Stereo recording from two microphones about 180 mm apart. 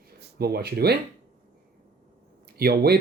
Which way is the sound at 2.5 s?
60° right (ahead or behind).